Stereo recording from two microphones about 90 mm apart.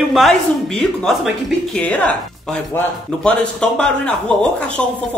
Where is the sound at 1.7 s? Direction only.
15° left (ahead or behind).